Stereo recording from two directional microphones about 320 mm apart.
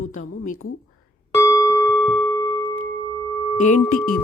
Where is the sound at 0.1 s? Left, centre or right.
Left.